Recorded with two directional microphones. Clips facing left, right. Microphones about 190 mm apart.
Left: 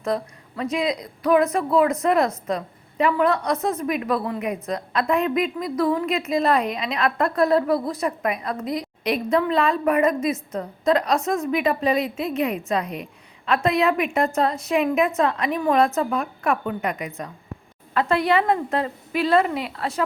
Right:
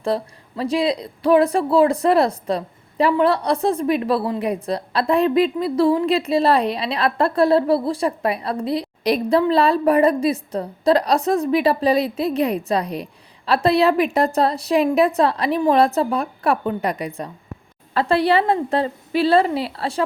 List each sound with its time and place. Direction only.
0.0 s a woman's voice: 30° right (ahead or behind)